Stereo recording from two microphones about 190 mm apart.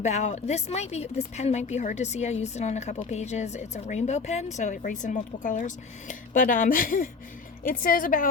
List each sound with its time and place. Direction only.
0.0 s a woman's voice: 35° left (ahead or behind)